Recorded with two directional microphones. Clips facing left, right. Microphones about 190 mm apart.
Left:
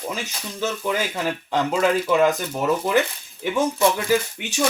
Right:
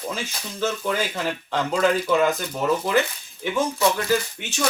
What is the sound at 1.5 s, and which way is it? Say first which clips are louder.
Speech: left 1 dB; 5° left (ahead or behind).